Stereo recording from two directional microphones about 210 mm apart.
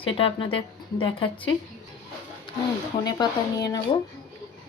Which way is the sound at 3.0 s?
20° left (ahead or behind).